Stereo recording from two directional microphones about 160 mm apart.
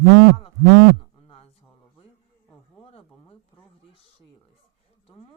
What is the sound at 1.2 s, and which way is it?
Speech, 35° left (ahead or behind).